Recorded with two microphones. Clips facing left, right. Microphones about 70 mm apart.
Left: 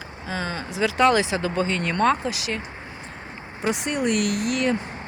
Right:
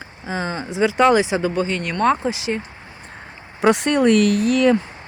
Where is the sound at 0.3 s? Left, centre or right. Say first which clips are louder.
Right 4 dB; centre.